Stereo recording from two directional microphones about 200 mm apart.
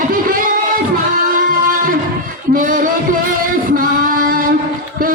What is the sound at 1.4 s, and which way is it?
Music, 45° right (ahead or behind).